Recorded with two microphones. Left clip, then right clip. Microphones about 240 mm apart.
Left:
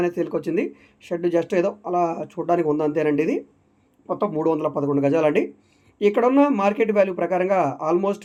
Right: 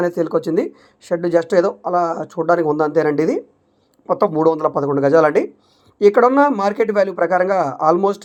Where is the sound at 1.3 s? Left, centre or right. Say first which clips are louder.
Right 7 dB; centre.